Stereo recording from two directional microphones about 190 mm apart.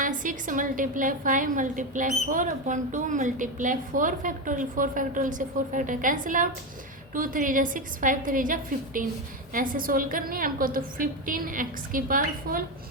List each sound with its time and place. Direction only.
0.0 s a woman's voice: 45° right (ahead or behind)